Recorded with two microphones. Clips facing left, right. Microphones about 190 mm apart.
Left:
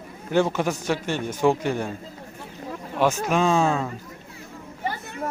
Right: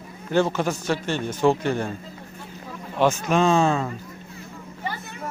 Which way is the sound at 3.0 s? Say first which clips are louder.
Right 1 dB; 5° left (ahead or behind).